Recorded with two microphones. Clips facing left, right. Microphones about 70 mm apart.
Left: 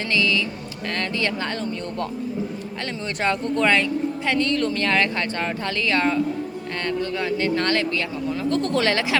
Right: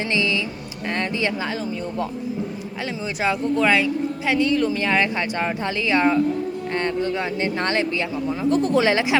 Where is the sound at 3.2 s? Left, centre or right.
Centre.